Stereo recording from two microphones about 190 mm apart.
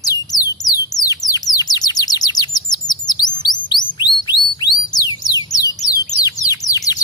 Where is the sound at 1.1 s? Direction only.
20° left (ahead or behind).